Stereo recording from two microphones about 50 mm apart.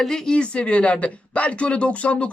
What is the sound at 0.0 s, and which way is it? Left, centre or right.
A woman's voice, centre.